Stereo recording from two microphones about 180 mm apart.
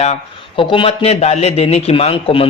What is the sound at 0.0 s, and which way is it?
Speech, 35° left (ahead or behind).